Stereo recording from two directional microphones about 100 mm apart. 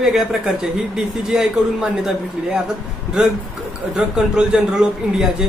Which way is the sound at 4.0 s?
5° right (ahead or behind).